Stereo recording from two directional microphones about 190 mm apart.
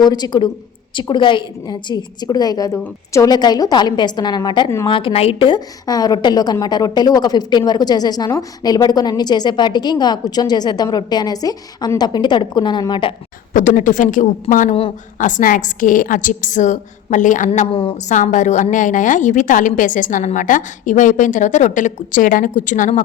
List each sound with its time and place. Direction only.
0.0 s a woman's voice: 20° left (ahead or behind)
13.5 s a woman's voice: 45° left (ahead or behind)